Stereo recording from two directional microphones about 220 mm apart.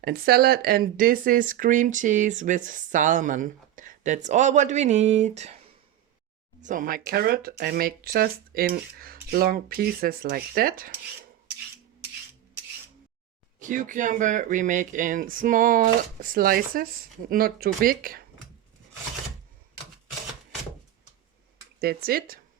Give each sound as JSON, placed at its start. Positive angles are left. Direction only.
{"t": 0.0, "sound": "speech", "side_deg": -45}
{"t": 6.6, "sound": "speech", "side_deg": -35}
{"t": 13.6, "sound": "speech", "side_deg": -35}
{"t": 21.8, "sound": "speech", "side_deg": -45}